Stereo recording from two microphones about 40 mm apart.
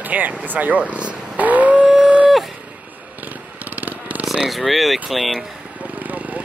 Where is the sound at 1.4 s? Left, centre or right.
Right.